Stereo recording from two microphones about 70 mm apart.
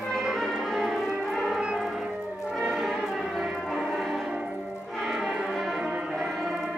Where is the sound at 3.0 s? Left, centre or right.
Centre.